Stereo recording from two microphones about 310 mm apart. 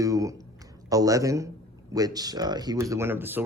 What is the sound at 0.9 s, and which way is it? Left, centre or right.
Speech, centre.